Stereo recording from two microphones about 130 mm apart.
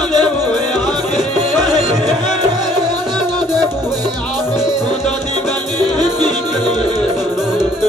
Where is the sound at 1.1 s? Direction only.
Centre (ahead or behind).